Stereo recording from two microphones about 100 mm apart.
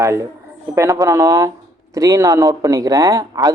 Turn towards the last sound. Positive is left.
turn(degrees=-35)  # may be behind; listen again after turning